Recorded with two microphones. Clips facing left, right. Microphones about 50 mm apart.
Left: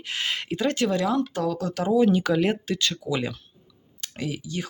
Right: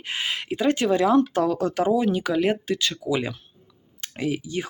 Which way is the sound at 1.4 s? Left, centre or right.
Right.